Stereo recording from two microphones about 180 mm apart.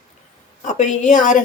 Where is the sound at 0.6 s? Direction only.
40° left (ahead or behind).